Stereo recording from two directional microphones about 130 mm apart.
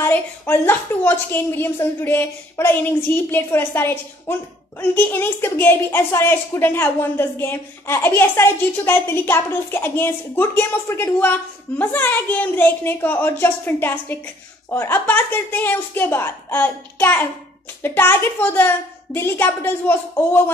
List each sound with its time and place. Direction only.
0.0 s a woman's voice: 15° left (ahead or behind)